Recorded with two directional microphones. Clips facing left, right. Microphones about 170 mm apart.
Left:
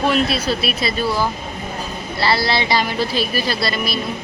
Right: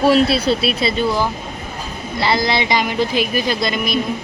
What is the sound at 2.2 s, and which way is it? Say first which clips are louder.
Speech: right 1 dB; 15° right (ahead or behind).